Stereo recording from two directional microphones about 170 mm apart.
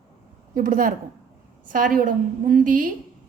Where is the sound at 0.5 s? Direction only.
55° right (ahead or behind).